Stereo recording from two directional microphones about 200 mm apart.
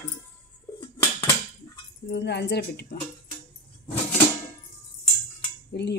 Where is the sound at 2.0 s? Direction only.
60° left (ahead or behind).